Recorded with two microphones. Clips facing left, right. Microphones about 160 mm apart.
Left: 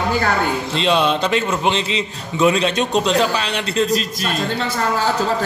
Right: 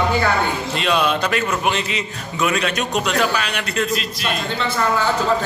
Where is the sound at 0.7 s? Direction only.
25° left (ahead or behind).